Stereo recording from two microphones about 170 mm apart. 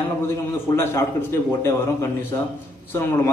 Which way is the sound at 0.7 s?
15° left (ahead or behind).